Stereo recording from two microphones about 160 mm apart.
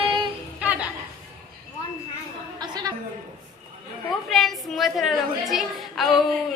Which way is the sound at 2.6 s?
25° right (ahead or behind).